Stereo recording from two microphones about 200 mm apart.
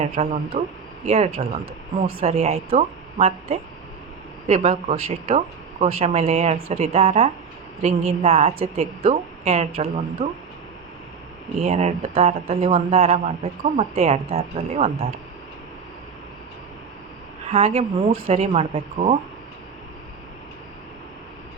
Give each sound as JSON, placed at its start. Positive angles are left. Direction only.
{"t": 0.0, "sound": "speech", "side_deg": -30}
{"t": 11.6, "sound": "speech", "side_deg": -35}
{"t": 17.5, "sound": "speech", "side_deg": -30}